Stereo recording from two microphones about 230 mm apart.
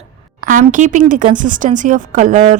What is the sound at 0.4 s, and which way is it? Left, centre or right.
A woman's voice, right.